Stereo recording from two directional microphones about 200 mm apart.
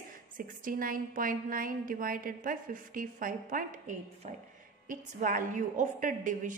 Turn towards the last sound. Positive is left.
turn(degrees=-40)  # may be behind; listen again after turning